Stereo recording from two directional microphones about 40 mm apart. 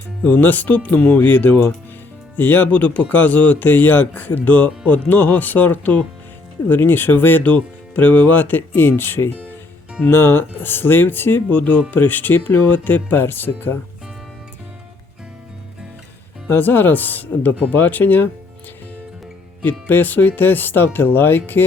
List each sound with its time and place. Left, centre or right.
0.2 s speech: left
2.6 s speech: left
7.4 s speech: left
16.5 s speech: left
19.9 s speech: left